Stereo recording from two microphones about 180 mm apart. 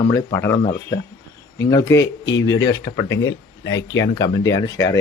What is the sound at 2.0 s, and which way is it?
Speech, 90° left.